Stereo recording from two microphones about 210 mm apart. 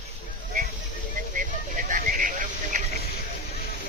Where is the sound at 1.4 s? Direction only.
40° right (ahead or behind).